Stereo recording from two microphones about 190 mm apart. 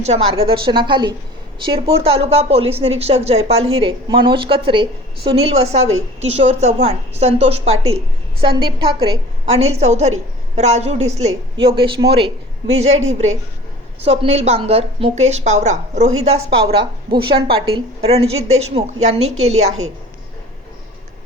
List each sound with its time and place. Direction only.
0.0 s a woman's voice: 35° right (ahead or behind)